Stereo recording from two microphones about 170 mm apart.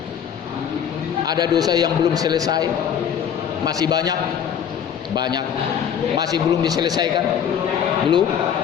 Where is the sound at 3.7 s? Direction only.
20° right (ahead or behind).